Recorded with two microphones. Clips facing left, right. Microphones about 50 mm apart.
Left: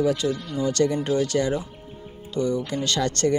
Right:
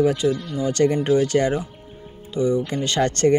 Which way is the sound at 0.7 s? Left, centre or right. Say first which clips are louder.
Right 4 dB; right.